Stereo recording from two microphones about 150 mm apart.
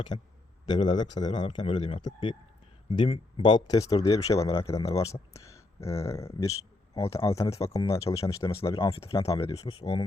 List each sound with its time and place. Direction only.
0.1 s speech: 30° left (ahead or behind)
9.0 s speech: 40° left (ahead or behind)
9.8 s speech: 20° left (ahead or behind)